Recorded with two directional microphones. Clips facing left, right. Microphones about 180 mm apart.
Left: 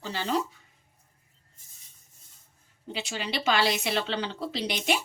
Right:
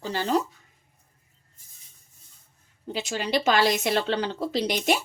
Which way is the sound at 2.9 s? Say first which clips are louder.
Right 6 dB; 40° right (ahead or behind).